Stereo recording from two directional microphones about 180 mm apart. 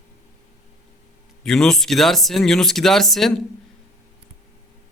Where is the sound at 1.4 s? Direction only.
5° left (ahead or behind).